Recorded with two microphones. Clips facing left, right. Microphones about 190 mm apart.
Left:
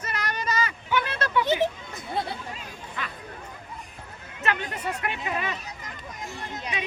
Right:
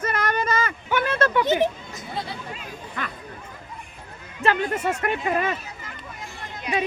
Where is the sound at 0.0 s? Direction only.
50° right (ahead or behind).